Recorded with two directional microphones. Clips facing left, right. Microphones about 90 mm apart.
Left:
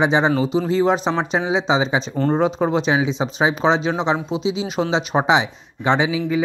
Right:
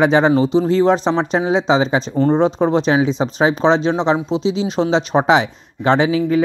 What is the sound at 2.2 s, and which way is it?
Speech, 25° right (ahead or behind).